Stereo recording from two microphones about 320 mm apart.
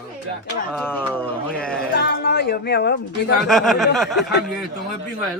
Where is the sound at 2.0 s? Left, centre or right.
Left.